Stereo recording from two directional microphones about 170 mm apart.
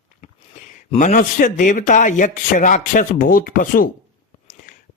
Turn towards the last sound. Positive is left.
turn(degrees=45)  # may be behind; listen again after turning